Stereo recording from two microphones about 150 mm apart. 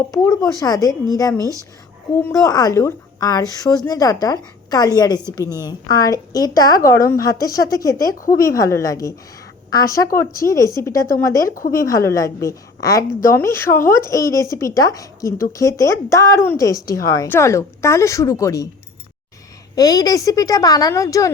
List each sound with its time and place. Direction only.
0.1 s a woman's voice: 25° left (ahead or behind)
19.7 s speech: 25° left (ahead or behind)